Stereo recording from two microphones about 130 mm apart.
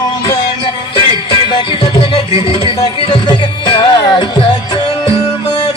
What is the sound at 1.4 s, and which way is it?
Music, 35° left (ahead or behind).